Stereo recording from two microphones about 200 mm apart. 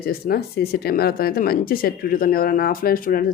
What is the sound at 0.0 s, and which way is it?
Speech, 50° left (ahead or behind).